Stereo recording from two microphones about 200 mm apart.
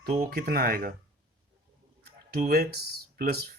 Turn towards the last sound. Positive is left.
turn(degrees=-50)  # may be behind; listen again after turning